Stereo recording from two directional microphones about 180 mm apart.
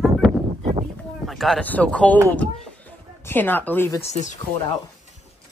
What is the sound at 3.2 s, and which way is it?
Speech, 10° left (ahead or behind).